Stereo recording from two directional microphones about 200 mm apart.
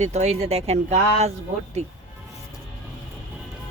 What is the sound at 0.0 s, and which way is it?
Speech, 35° right (ahead or behind).